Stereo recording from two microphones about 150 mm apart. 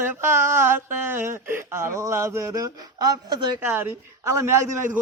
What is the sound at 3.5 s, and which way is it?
Speech, 10° right (ahead or behind).